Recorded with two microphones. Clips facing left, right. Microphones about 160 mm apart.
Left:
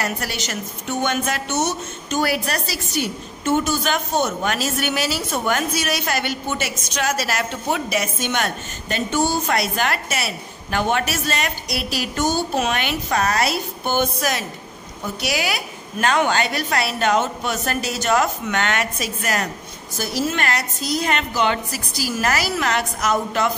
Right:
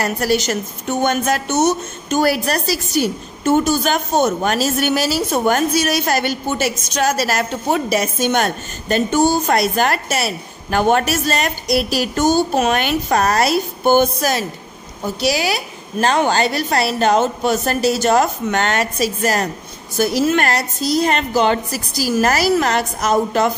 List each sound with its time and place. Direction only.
0.0 s a woman's voice: 40° right (ahead or behind)
20.0 s a woman's voice: 60° right (ahead or behind)
20.4 s a woman's voice: 35° right (ahead or behind)